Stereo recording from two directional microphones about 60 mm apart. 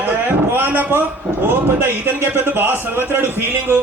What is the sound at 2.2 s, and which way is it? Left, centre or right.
A man's voice, right.